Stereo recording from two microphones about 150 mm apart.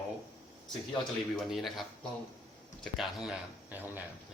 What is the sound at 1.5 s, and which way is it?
Speech, centre (ahead or behind).